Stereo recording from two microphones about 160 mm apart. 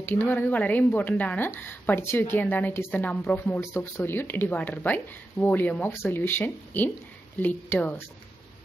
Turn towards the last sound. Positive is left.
turn(degrees=10)  # may be behind; listen again after turning